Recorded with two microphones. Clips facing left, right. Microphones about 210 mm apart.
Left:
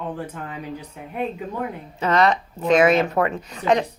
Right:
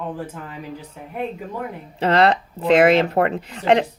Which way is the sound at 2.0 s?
30° right (ahead or behind).